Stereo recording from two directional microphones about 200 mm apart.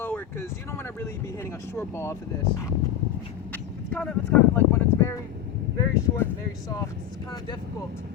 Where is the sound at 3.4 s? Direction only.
5° left (ahead or behind).